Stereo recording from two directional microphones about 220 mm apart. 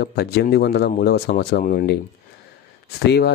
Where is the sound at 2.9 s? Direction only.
45° left (ahead or behind).